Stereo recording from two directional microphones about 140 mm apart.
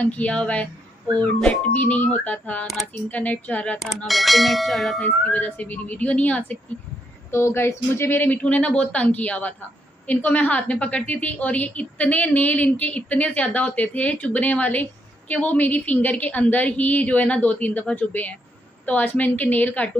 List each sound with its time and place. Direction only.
0.0 s a woman's voice: 10° left (ahead or behind)
2.6 s speech: centre (ahead or behind)
3.1 s a woman's voice: 10° left (ahead or behind)
3.8 s speech: centre (ahead or behind)
5.0 s a woman's voice: 10° left (ahead or behind)